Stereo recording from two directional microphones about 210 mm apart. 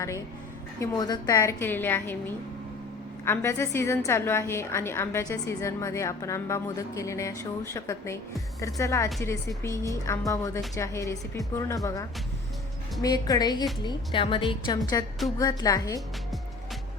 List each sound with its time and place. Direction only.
0.8 s a woman's voice: 20° left (ahead or behind)